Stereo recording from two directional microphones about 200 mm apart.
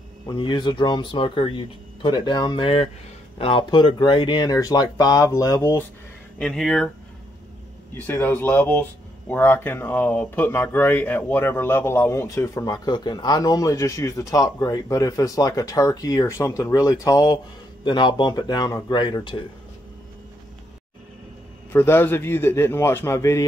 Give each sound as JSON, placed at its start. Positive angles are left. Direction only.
{"t": 0.3, "sound": "speech", "side_deg": 25}
{"t": 6.3, "sound": "speech", "side_deg": 0}
{"t": 8.0, "sound": "speech", "side_deg": 10}
{"t": 21.7, "sound": "speech", "side_deg": 10}